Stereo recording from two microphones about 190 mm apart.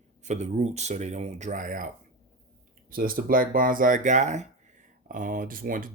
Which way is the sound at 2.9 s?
50° right (ahead or behind).